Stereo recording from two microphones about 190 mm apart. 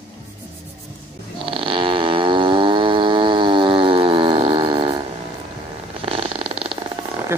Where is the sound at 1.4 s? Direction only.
25° right (ahead or behind).